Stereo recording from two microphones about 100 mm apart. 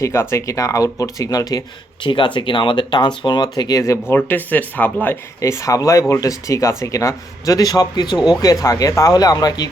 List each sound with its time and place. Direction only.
0.0 s speech: 30° left (ahead or behind)
2.0 s speech: 55° left (ahead or behind); by 3.9 s 35° left (ahead or behind)
4.1 s speech: 20° left (ahead or behind)
5.4 s speech: 35° left (ahead or behind)